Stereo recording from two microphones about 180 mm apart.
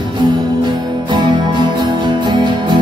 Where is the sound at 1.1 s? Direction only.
25° right (ahead or behind).